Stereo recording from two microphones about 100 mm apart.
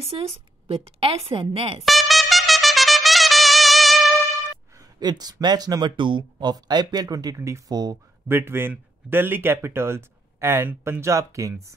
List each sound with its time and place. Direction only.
0.0 s a woman's voice: 80° right
1.9 s trumpet: centre (ahead or behind)
4.7 s speech: 45° right (ahead or behind)
7.7 s speech: 40° right (ahead or behind)
8.3 s speech: 25° right (ahead or behind)